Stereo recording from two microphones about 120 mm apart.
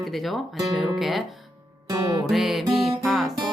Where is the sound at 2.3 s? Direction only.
Centre (ahead or behind).